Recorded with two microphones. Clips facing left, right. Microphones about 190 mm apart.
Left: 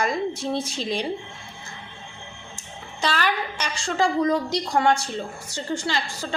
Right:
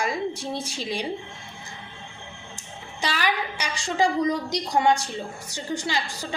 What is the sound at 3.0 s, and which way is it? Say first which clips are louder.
A woman's voice: left 2 dB; 10° right (ahead or behind).